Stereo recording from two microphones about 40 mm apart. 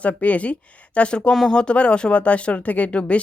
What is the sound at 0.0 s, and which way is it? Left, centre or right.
Speech, left.